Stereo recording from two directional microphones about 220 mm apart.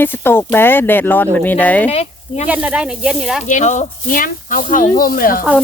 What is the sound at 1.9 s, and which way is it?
Speech, 30° left (ahead or behind).